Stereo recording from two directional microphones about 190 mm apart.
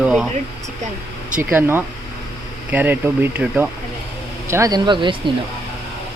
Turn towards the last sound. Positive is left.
turn(degrees=-25)  # may be behind; listen again after turning